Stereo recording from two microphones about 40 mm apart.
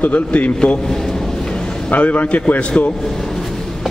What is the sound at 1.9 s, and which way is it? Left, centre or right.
Speech, left.